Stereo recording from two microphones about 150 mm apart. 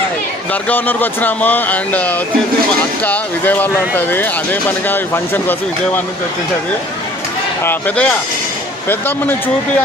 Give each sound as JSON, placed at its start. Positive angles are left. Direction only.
{"t": 0.5, "sound": "speech", "side_deg": 10}
{"t": 7.6, "sound": "speech", "side_deg": 15}